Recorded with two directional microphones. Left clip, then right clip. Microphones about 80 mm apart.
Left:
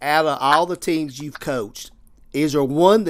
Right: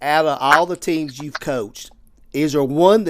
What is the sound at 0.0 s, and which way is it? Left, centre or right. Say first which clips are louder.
Speech: right 1 dB; centre.